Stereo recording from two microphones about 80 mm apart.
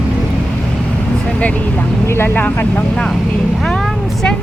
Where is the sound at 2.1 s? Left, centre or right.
Left.